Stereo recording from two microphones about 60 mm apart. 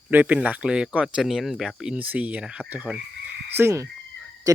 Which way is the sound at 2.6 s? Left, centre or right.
Right.